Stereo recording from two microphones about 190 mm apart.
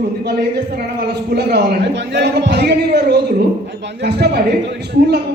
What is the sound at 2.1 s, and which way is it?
A man's voice, 60° right (ahead or behind).